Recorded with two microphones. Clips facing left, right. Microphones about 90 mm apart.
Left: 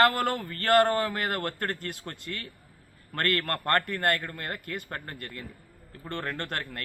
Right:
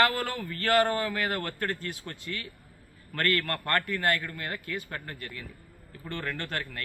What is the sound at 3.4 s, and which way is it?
A man's voice, 45° left (ahead or behind).